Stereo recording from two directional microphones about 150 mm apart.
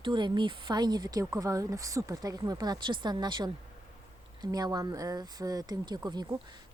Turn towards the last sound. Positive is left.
turn(degrees=-30)  # may be behind; listen again after turning